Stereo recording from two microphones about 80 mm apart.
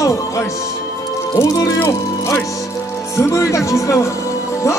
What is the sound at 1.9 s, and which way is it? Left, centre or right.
Speech, left.